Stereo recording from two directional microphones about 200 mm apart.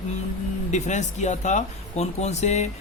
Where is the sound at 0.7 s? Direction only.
35° left (ahead or behind).